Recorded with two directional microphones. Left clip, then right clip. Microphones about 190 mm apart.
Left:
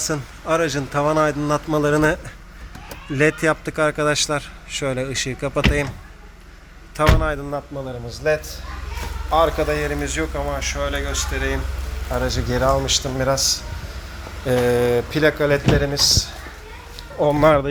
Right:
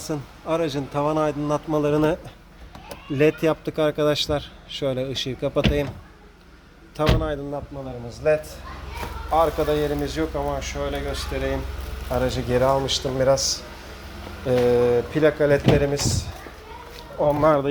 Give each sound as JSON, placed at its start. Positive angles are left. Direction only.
{"t": 0.0, "sound": "a man's voice", "side_deg": 5}
{"t": 3.1, "sound": "a man's voice", "side_deg": -10}
{"t": 6.9, "sound": "a man's voice", "side_deg": 0}
{"t": 9.6, "sound": "a man's voice", "side_deg": -15}
{"t": 14.4, "sound": "a man's voice", "side_deg": -5}
{"t": 17.2, "sound": "speech", "side_deg": 25}